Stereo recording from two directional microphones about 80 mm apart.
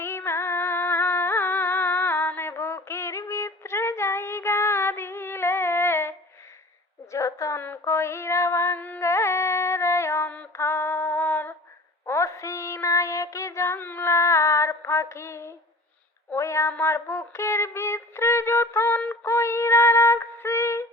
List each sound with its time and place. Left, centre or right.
0.0 s music: left
7.0 s a sound: left
7.6 s female singing: left
9.0 s carnatic music: left
10.2 s female singing: centre
10.5 s female singing: left
12.0 s child singing: left
14.1 s female singing: left
16.4 s child singing: left
16.7 s music: left